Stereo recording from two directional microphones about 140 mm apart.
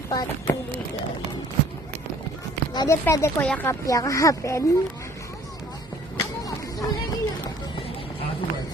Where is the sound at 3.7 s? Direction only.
25° left (ahead or behind).